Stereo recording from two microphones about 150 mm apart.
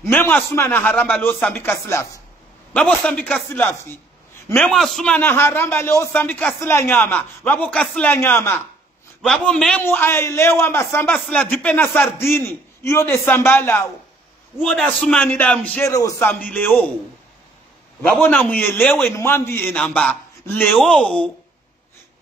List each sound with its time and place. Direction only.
0.0 s a man's voice: 15° left (ahead or behind)
2.7 s a man's voice: 5° left (ahead or behind)
4.6 s a man's voice: 5° left (ahead or behind)
15.8 s a man's voice: 20° left (ahead or behind)
18.0 s a man's voice: 10° left (ahead or behind)
20.7 s a man's voice: centre (ahead or behind)